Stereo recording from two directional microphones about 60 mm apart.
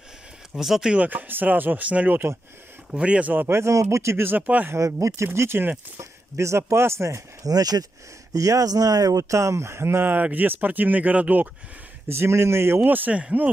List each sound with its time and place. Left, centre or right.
0.6 s speech: centre
0.9 s speech: right
3.3 s speech: right
4.3 s speech: right
5.0 s speech: right
7.4 s speech: right
8.3 s speech: right
10.0 s speech: right
12.1 s speech: right
12.8 s a man's voice: right